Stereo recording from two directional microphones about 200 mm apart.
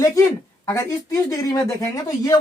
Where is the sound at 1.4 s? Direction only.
15° left (ahead or behind).